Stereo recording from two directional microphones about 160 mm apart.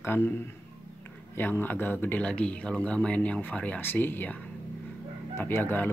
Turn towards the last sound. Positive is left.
turn(degrees=15)  # may be behind; listen again after turning